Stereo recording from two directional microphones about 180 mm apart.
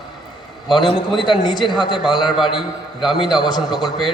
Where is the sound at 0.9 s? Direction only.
25° left (ahead or behind).